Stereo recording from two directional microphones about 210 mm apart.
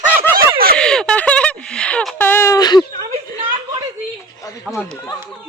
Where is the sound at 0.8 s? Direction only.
5° left (ahead or behind); by 2.8 s 20° left (ahead or behind).